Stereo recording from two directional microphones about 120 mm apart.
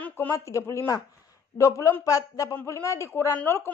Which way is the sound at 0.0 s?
15° left (ahead or behind).